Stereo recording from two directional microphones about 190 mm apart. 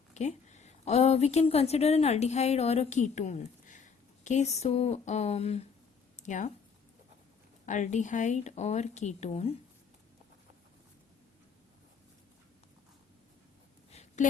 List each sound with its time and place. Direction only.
0.1 s a woman's voice: 40° left (ahead or behind)
7.6 s speech: 40° left (ahead or behind)
13.9 s a sound: 35° left (ahead or behind)